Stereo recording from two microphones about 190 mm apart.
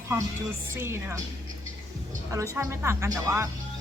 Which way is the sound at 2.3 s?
15° right (ahead or behind).